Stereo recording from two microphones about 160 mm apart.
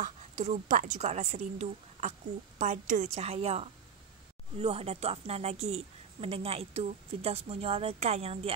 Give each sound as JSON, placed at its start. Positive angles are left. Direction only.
{"t": 0.0, "sound": "a woman's voice", "side_deg": -50}